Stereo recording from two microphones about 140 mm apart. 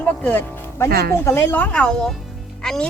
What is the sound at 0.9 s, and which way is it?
Speech, 90° right.